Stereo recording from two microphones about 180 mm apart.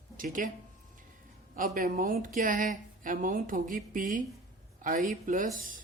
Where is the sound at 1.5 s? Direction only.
50° right (ahead or behind).